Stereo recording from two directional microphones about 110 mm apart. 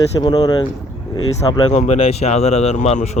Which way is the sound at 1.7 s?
80° left.